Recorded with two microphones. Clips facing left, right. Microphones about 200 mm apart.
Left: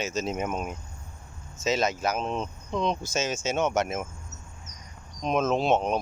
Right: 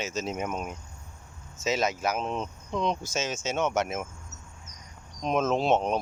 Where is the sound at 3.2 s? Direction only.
Centre (ahead or behind).